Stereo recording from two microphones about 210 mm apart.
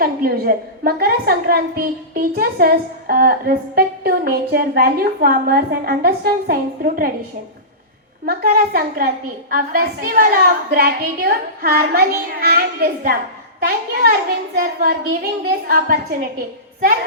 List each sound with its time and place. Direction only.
0.0 s a woman's voice: 45° right (ahead or behind)
8.2 s a woman's voice: 45° right (ahead or behind)